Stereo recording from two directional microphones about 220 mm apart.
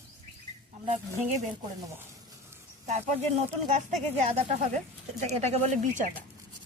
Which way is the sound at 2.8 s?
30° right (ahead or behind).